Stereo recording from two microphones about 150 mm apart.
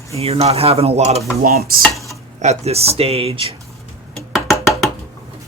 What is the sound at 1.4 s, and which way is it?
Stir, 75° right (ahead or behind).